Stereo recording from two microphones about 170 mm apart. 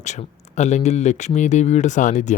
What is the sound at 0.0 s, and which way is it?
Speech, 45° left (ahead or behind).